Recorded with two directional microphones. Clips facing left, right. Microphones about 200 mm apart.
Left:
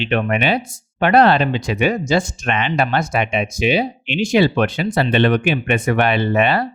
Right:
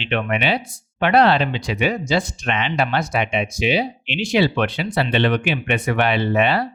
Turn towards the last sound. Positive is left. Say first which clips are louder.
# left 2 dB
turn(degrees=50)  # may be behind; listen again after turning